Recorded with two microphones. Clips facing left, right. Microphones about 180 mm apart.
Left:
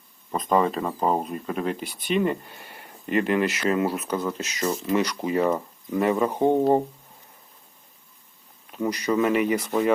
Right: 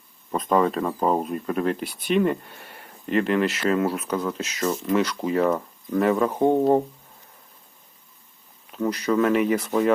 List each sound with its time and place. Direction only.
0.3 s speech: centre (ahead or behind)
8.7 s speech: 10° left (ahead or behind)